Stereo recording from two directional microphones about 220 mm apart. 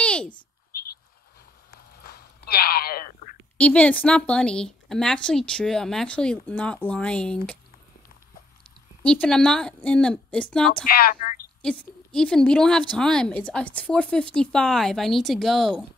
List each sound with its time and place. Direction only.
0.0 s a sound: 5° left (ahead or behind)
2.0 s a sound: 45° left (ahead or behind)
3.5 s a woman's voice: 5° left (ahead or behind)
9.0 s a woman's voice: 5° left (ahead or behind)
10.9 s a woman's voice: 40° left (ahead or behind)
11.6 s a woman's voice: 5° left (ahead or behind)